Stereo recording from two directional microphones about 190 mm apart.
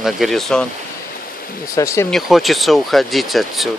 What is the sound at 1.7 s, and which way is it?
Speech, 15° left (ahead or behind).